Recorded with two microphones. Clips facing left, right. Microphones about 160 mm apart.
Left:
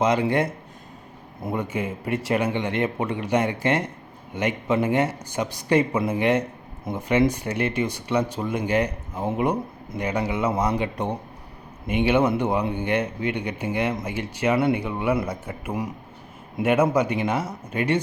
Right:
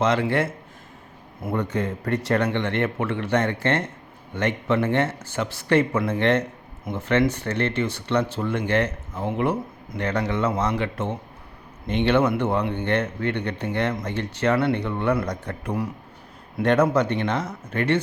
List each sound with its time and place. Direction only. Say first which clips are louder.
0.0 s speech: left 1 dB; 15° left (ahead or behind)
1.6 s speech: right 2 dB; 10° left (ahead or behind)